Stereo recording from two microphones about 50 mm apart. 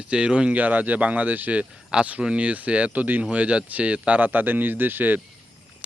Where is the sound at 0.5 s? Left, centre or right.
Right.